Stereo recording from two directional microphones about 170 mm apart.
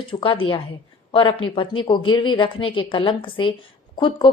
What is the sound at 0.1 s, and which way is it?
A woman's voice, 30° left (ahead or behind).